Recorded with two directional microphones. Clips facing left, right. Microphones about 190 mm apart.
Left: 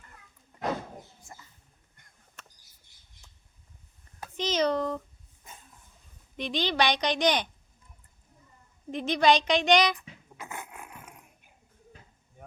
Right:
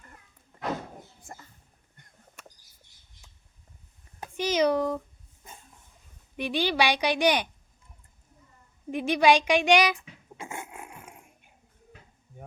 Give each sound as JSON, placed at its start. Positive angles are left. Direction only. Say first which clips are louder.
{"t": 2.4, "sound": "bird", "louder": "right 3 dB", "side_deg": -10}
{"t": 4.2, "sound": "a child's voice", "louder": "right 3 dB", "side_deg": -10}
{"t": 6.3, "sound": "speech", "louder": "right 2 dB", "side_deg": -10}
{"t": 8.9, "sound": "speech", "louder": "right 2 dB", "side_deg": -10}
{"t": 10.3, "sound": "dog", "louder": "right 3 dB", "side_deg": -25}